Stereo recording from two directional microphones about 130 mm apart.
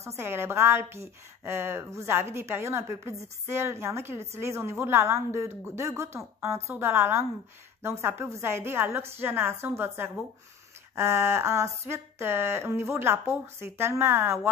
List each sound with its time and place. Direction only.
0.2 s a woman's voice: 20° right (ahead or behind)